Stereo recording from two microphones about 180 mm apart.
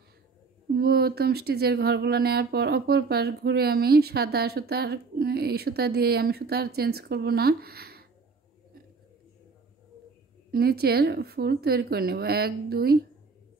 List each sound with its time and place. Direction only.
0.7 s speech: 60° right (ahead or behind)
10.5 s speech: 60° right (ahead or behind)